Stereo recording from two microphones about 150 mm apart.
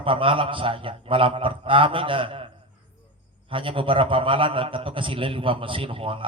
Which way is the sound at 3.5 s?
35° right (ahead or behind).